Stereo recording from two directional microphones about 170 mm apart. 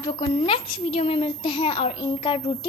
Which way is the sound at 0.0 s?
35° left (ahead or behind).